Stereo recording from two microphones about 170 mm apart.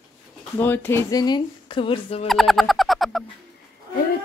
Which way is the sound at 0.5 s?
10° left (ahead or behind).